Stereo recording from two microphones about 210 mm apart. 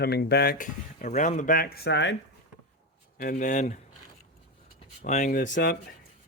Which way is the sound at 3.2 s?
40° left (ahead or behind).